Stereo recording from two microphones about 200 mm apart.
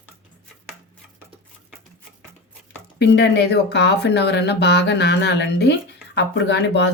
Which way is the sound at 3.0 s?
60° left (ahead or behind).